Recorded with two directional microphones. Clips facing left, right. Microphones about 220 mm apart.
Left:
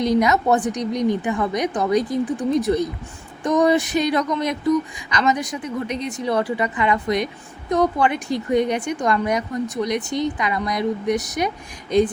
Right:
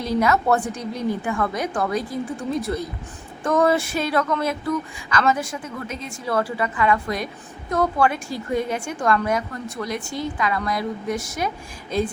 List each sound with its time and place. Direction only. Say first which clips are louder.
0.2 s a woman's voice: left 2 dB; 15° left (ahead or behind)